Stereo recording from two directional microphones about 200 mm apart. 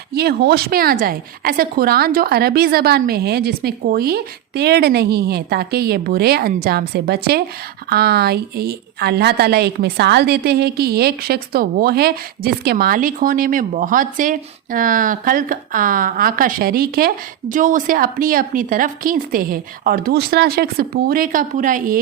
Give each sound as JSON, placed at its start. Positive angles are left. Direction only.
{"t": 0.1, "sound": "a woman's voice", "side_deg": -55}